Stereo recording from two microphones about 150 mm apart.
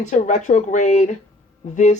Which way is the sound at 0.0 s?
55° left (ahead or behind).